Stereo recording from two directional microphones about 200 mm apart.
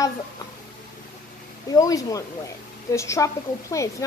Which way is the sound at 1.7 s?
15° left (ahead or behind).